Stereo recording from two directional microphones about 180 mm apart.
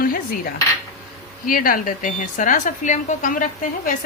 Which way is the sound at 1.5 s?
50° left (ahead or behind).